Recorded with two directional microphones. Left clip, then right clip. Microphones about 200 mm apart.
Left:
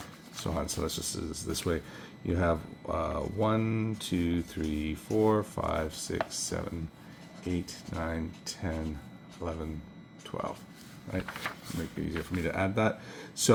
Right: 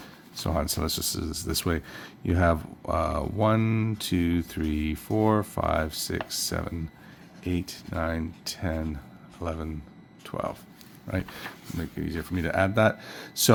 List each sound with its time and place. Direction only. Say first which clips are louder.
0.4 s speech: right 5 dB; 45° right (ahead or behind)
11.9 s speech: right 3 dB; 40° right (ahead or behind)